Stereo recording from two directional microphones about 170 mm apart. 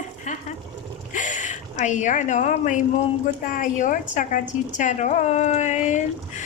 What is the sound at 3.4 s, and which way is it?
A woman's voice, 50° left (ahead or behind).